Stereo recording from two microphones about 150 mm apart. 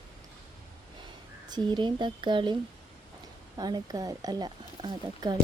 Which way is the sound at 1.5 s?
30° right (ahead or behind).